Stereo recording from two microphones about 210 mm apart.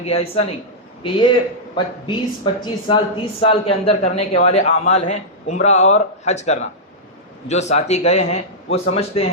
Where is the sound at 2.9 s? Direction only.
20° left (ahead or behind).